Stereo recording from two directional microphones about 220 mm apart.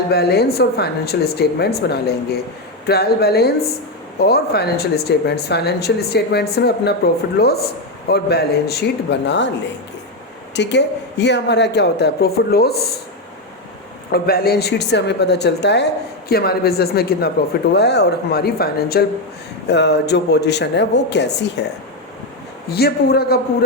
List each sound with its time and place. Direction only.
0.1 s speech: 45° left (ahead or behind)
10.5 s speech: 50° left (ahead or behind)
14.1 s speech: 45° left (ahead or behind)
22.7 s speech: 45° left (ahead or behind)